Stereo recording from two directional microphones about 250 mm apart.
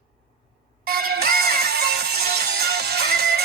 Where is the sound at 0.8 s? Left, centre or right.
Right.